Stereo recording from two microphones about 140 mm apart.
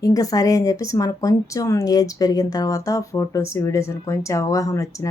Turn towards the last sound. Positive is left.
turn(degrees=25)  # may be behind; listen again after turning